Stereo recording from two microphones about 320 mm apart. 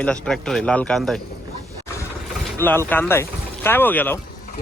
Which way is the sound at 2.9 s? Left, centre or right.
Centre.